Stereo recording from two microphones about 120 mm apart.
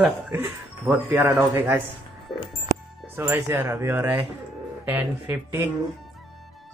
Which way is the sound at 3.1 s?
20° right (ahead or behind).